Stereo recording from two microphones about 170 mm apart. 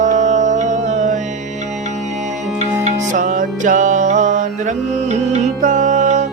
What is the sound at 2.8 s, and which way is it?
Music, 45° right (ahead or behind).